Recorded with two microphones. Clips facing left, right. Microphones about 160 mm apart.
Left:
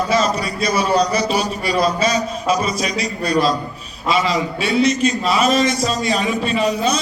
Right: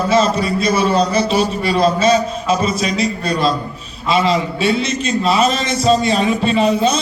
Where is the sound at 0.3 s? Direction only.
25° right (ahead or behind).